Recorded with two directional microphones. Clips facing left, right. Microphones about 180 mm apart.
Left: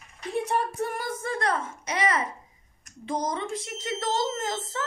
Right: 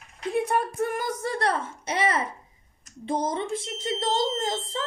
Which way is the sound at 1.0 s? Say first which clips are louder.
Right 2 dB; 40° right (ahead or behind).